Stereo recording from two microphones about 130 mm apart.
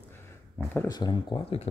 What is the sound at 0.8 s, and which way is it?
Speech, 30° left (ahead or behind).